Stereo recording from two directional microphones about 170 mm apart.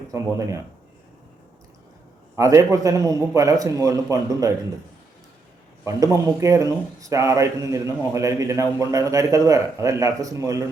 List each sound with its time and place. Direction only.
0.1 s a man's voice: 20° right (ahead or behind)
2.3 s a man's voice: 15° right (ahead or behind)
5.8 s a man's voice: 20° right (ahead or behind)